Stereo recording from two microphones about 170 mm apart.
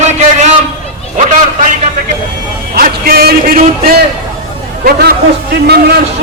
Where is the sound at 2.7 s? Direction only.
60° right (ahead or behind).